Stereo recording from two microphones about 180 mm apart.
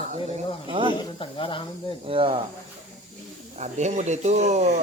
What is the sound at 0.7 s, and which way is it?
Speech, 30° right (ahead or behind).